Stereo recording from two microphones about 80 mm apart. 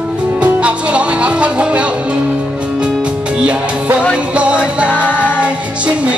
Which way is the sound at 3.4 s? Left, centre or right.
Centre.